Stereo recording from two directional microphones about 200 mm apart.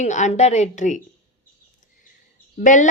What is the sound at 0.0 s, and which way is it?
Speech, 35° left (ahead or behind).